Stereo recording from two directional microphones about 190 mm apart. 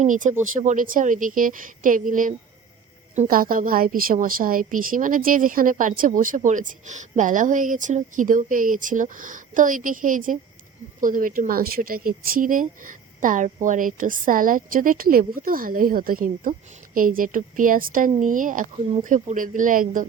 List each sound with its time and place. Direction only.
0.0 s speech: 40° right (ahead or behind)